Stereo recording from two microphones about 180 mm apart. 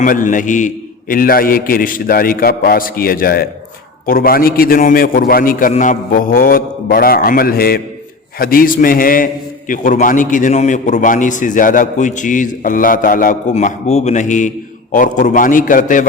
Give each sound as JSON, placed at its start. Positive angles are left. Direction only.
{"t": 0.0, "sound": "a man's voice", "side_deg": 45}